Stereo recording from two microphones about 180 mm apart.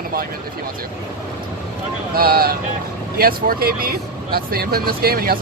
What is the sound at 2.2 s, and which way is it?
Speech, 55° right (ahead or behind).